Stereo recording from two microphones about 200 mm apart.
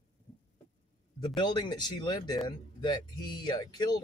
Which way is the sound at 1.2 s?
20° left (ahead or behind).